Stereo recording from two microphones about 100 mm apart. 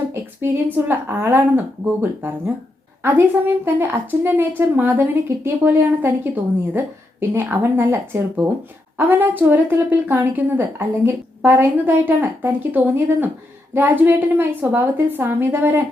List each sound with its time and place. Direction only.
0.1 s a woman's voice: 25° right (ahead or behind)